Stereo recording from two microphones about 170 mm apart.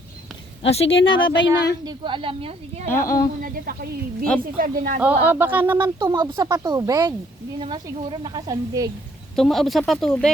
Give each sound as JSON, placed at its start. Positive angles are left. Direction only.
{"t": 0.7, "sound": "speech", "side_deg": 35}
{"t": 1.8, "sound": "speech", "side_deg": -25}
{"t": 3.0, "sound": "speech", "side_deg": 60}
{"t": 3.4, "sound": "a woman's voice", "side_deg": -60}
{"t": 5.3, "sound": "speech", "side_deg": -10}
{"t": 9.3, "sound": "speech", "side_deg": 0}